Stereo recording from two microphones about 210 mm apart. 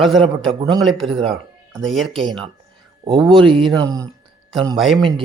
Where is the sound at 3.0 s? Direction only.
15° right (ahead or behind).